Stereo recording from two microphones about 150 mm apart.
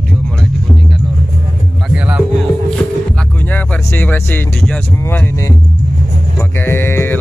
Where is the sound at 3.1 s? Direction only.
10° left (ahead or behind).